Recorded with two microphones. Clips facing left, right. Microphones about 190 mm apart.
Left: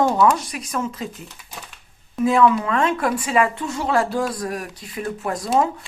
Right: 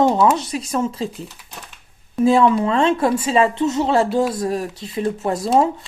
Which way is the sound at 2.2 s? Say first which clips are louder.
Right 2 dB; 30° right (ahead or behind).